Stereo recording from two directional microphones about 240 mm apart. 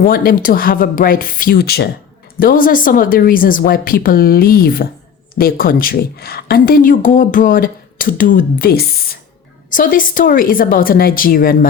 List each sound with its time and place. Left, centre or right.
0.0 s a woman's voice: left